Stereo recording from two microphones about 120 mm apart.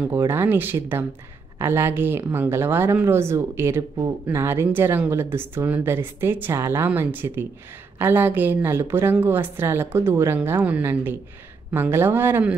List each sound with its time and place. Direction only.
0.1 s speech: 20° right (ahead or behind)